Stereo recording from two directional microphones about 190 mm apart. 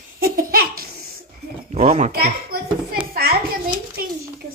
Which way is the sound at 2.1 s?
55° right (ahead or behind).